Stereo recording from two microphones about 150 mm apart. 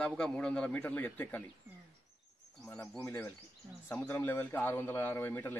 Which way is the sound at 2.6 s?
10° left (ahead or behind).